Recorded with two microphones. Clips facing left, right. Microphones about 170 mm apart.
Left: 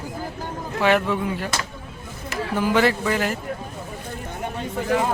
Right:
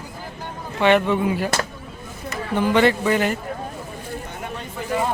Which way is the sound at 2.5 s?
5° left (ahead or behind).